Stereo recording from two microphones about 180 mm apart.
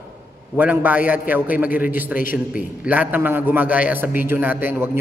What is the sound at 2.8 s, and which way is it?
A man's voice, 10° right (ahead or behind).